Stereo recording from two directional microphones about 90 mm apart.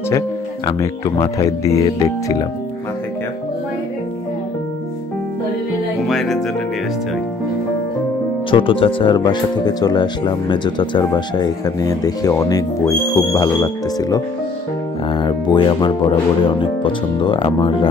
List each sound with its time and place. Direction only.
0.7 s speech: 35° left (ahead or behind)
6.0 s music: centre (ahead or behind)
8.5 s speech: 75° left (ahead or behind); by 14.2 s 40° left (ahead or behind)
15.0 s speech: 65° left (ahead or behind)